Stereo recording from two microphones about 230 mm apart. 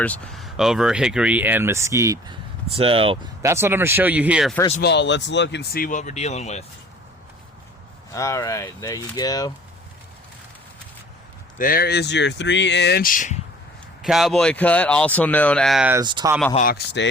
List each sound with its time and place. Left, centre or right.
0.0 s speech: centre; by 3.2 s right
3.4 s speech: centre
4.8 s speech: left
8.1 s speech: centre
11.5 s speech: left
14.0 s speech: centre
16.0 s speech: centre
16.6 s speech: left